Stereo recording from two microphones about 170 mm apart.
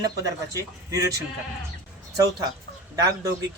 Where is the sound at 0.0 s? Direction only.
20° right (ahead or behind).